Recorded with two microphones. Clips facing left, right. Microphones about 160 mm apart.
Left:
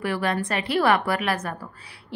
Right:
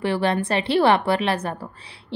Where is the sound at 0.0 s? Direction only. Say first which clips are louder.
Right 4 dB; 30° right (ahead or behind).